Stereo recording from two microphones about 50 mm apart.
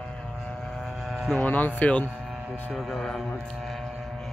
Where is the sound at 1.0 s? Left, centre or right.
Centre.